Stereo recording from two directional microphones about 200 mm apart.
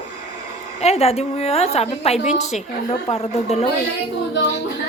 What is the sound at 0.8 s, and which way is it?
A woman's voice, 30° left (ahead or behind).